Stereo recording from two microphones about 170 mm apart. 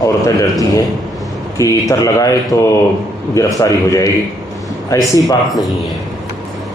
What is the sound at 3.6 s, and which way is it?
A man's voice, 20° left (ahead or behind).